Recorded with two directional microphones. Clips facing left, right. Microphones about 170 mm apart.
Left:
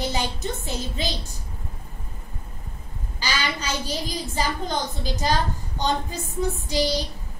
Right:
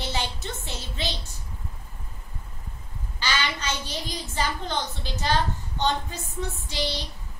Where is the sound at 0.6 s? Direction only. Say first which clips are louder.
Left 4 dB; 40° left (ahead or behind).